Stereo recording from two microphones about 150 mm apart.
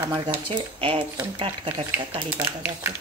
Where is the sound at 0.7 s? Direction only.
35° right (ahead or behind).